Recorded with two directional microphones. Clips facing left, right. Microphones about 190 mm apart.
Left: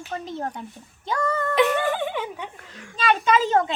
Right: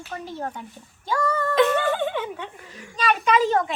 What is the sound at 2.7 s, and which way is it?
Speech, centre (ahead or behind).